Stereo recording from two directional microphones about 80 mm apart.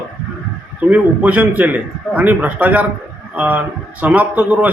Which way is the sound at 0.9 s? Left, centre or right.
Centre.